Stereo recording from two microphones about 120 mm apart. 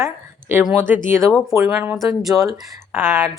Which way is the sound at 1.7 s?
10° right (ahead or behind).